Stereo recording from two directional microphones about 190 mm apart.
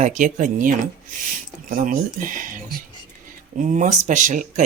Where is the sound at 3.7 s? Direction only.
40° right (ahead or behind).